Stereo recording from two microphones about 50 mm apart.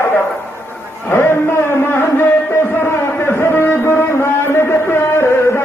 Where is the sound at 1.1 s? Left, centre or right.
Left.